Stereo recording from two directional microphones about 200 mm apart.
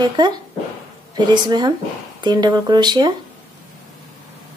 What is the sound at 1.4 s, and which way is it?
A woman's voice, 20° right (ahead or behind).